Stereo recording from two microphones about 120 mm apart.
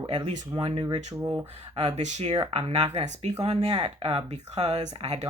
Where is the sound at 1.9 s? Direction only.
75° right (ahead or behind).